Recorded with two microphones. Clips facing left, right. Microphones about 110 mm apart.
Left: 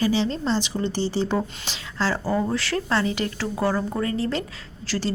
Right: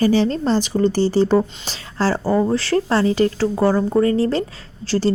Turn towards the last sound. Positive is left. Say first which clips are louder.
# right 8 dB
turn(degrees=-30)  # may be behind; listen again after turning